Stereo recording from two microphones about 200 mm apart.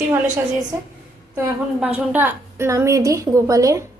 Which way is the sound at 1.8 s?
10° right (ahead or behind).